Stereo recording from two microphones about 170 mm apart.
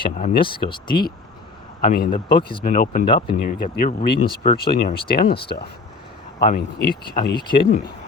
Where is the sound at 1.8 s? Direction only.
55° left (ahead or behind).